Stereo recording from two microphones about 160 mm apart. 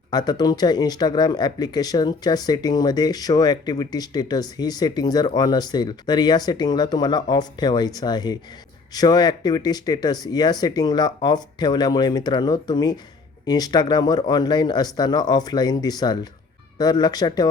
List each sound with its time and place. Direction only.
0.1 s speech: 25° left (ahead or behind)